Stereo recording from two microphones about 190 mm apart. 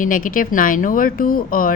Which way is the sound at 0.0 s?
45° left (ahead or behind).